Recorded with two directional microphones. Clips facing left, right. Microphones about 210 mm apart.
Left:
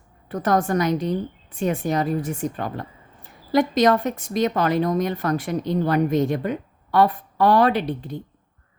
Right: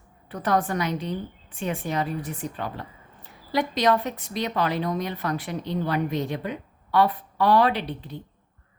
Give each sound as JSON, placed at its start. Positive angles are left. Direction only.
{"t": 0.3, "sound": "a woman's voice", "side_deg": 45}